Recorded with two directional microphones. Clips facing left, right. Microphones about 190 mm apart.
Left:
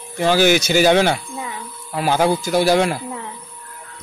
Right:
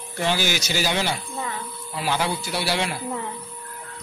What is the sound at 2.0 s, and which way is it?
Speech, 45° left (ahead or behind).